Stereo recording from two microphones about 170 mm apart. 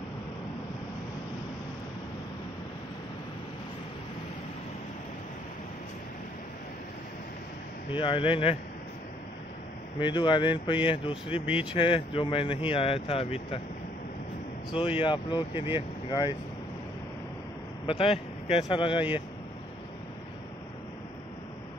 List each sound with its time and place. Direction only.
7.9 s speech: 30° left (ahead or behind)
9.9 s speech: 30° left (ahead or behind)
14.7 s speech: 30° left (ahead or behind)
17.8 s speech: 35° left (ahead or behind)